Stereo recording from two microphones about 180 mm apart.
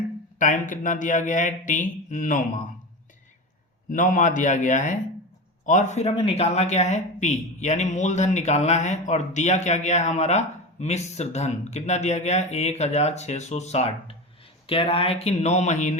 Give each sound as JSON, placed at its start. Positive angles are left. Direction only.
{"t": 0.3, "sound": "speech", "side_deg": 45}
{"t": 3.8, "sound": "speech", "side_deg": 45}